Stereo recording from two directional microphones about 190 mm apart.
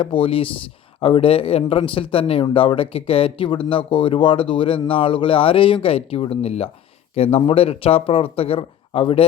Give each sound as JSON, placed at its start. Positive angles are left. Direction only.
{"t": 0.0, "sound": "speech", "side_deg": 30}